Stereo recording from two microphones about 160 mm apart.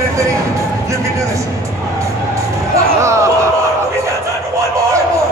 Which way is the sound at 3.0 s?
20° right (ahead or behind).